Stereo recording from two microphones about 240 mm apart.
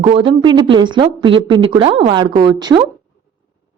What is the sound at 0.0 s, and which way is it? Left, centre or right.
A woman's voice, right.